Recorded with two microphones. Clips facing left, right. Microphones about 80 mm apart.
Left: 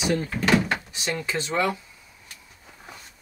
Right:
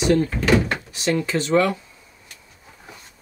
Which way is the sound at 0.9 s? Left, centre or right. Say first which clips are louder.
Right 6 dB; centre.